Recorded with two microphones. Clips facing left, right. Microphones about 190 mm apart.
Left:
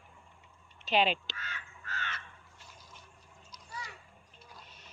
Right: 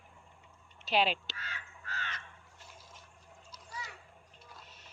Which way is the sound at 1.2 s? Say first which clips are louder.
Left 1 dB; 35° right (ahead or behind).